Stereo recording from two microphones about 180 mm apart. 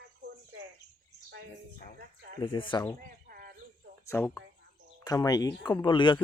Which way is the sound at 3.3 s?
55° right (ahead or behind).